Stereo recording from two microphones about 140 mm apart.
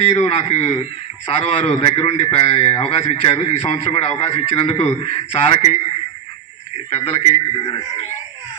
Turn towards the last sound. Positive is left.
turn(degrees=45)  # may be behind; listen again after turning